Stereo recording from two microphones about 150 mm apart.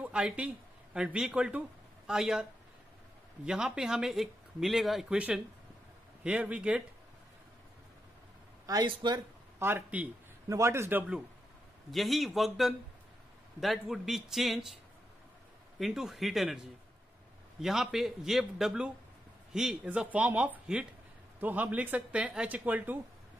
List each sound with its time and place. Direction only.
0.0 s speech: 10° right (ahead or behind)
3.4 s speech: 5° right (ahead or behind)
8.6 s speech: 30° right (ahead or behind)
9.6 s speech: 15° right (ahead or behind)
15.8 s speech: centre (ahead or behind)